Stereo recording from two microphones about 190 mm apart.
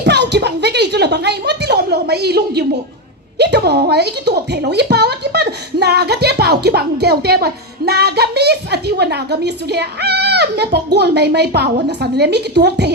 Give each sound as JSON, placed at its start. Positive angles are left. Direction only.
{"t": 0.0, "sound": "speech", "side_deg": -65}